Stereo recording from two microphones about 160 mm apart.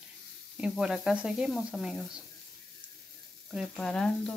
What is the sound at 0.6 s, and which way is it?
Speech, 5° right (ahead or behind).